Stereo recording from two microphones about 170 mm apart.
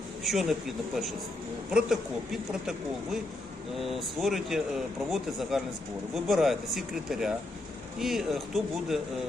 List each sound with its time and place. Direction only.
0.3 s speech: centre (ahead or behind)
1.7 s speech: 5° right (ahead or behind)